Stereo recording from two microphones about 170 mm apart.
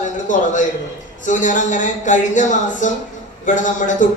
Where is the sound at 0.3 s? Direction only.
50° left (ahead or behind).